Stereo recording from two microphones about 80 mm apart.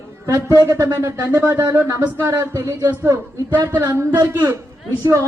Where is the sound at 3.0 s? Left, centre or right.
Right.